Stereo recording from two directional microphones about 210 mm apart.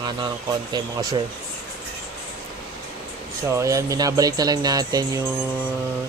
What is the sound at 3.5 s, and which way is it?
Speech, 15° right (ahead or behind).